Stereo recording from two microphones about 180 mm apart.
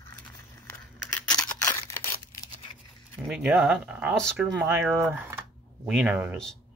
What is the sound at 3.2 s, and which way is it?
Speech, centre (ahead or behind).